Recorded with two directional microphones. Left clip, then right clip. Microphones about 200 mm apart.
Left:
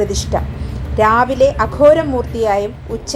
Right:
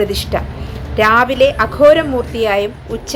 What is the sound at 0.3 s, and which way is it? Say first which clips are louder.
A woman's voice: even; 20° right (ahead or behind).